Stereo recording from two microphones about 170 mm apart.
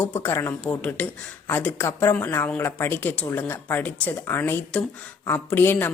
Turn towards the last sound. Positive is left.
turn(degrees=10)  # may be behind; listen again after turning